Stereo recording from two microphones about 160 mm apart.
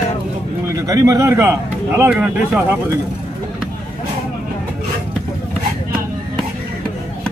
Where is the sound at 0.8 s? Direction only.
20° right (ahead or behind).